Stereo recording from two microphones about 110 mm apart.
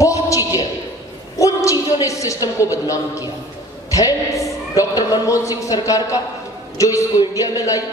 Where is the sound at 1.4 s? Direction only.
30° left (ahead or behind).